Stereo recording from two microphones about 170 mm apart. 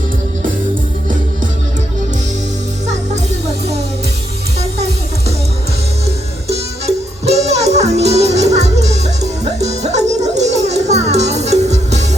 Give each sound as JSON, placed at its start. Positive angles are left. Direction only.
{"t": 6.5, "sound": "music", "side_deg": -40}